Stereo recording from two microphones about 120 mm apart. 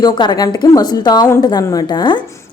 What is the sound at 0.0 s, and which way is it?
A woman's voice, 35° left (ahead or behind).